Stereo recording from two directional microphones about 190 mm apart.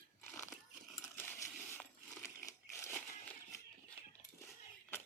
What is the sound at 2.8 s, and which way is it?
Crushing, 10° left (ahead or behind).